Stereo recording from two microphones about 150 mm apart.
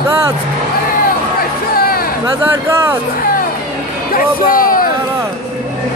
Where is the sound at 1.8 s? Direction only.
80° left.